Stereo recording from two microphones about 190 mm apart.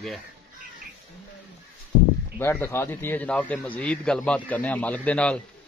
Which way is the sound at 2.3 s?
10° left (ahead or behind).